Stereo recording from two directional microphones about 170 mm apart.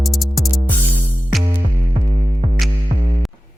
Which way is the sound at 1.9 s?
45° right (ahead or behind).